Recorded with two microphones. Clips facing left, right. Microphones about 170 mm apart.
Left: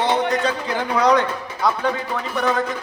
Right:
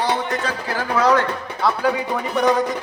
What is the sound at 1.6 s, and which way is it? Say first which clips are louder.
A man's voice: right 1 dB; 5° right (ahead or behind).